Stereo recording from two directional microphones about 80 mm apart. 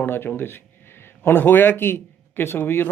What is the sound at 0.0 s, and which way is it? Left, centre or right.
Speech, left.